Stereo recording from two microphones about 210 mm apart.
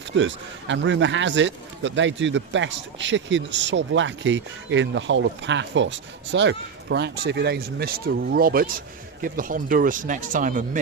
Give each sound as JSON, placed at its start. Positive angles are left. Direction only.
{"t": 0.2, "sound": "a man's voice", "side_deg": -60}